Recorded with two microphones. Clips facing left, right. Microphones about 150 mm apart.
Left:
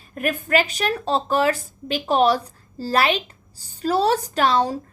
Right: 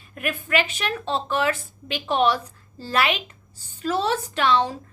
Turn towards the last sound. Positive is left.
turn(degrees=40)  # may be behind; listen again after turning